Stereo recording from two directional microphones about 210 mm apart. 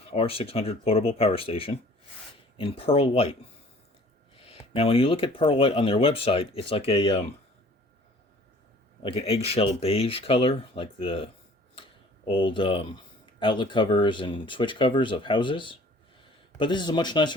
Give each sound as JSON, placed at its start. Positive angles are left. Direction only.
{"t": 0.1, "sound": "speech", "side_deg": 25}
{"t": 4.4, "sound": "speech", "side_deg": 25}
{"t": 9.1, "sound": "speech", "side_deg": 30}
{"t": 11.7, "sound": "a sound", "side_deg": 25}
{"t": 13.4, "sound": "speech", "side_deg": 20}